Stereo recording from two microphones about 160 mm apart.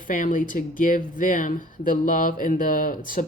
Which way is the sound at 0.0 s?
55° left (ahead or behind).